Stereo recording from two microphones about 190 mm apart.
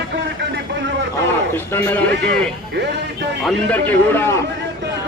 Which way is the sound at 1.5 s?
10° left (ahead or behind).